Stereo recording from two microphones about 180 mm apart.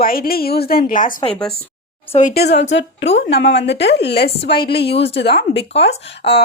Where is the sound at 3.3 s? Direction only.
80° left.